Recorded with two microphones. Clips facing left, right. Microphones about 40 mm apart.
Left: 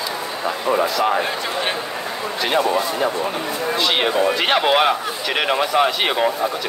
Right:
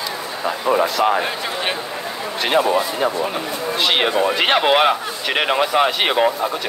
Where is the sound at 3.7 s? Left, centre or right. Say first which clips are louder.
Right 1 dB; right.